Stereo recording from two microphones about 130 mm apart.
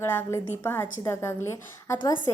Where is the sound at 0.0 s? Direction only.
20° left (ahead or behind).